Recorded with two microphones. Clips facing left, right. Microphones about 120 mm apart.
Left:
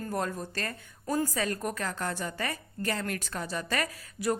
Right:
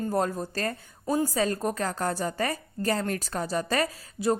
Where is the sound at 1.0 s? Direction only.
25° right (ahead or behind).